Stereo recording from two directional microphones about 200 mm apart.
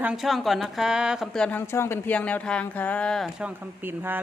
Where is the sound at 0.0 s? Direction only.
5° right (ahead or behind).